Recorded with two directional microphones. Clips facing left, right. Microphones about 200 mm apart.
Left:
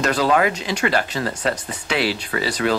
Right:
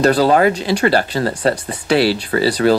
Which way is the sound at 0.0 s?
35° right (ahead or behind).